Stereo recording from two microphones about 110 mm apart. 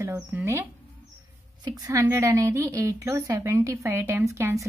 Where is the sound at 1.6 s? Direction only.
35° right (ahead or behind).